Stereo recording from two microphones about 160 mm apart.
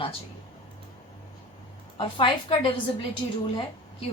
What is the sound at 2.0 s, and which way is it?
Speech, 35° left (ahead or behind).